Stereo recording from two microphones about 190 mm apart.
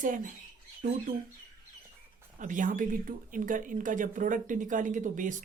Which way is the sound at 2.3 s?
45° right (ahead or behind).